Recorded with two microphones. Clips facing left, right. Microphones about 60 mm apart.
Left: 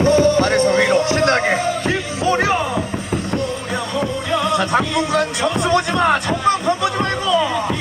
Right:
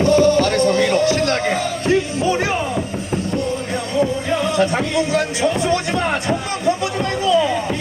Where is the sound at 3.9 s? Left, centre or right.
Left.